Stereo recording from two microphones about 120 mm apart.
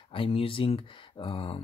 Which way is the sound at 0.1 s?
50° left (ahead or behind).